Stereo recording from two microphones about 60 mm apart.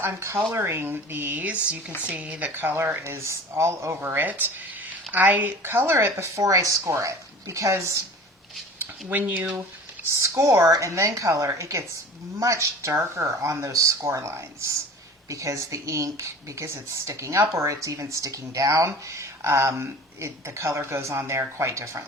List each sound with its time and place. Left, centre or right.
0.0 s speech: right
4.1 s speech: right
8.8 s speech: right
10.2 s speech: right
19.0 s speech: right